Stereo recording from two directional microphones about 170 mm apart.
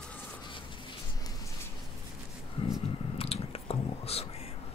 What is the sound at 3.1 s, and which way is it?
Whispering, 35° left (ahead or behind).